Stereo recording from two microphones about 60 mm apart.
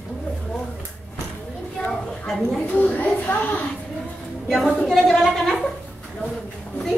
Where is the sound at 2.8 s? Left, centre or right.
Left.